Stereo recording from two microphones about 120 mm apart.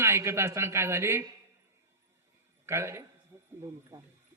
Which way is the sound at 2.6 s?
20° right (ahead or behind).